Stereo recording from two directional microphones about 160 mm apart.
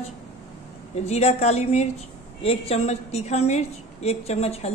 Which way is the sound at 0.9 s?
45° left (ahead or behind).